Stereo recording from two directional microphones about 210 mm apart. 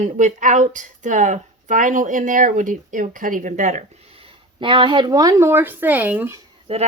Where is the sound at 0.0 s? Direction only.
35° right (ahead or behind); by 6.4 s 10° right (ahead or behind).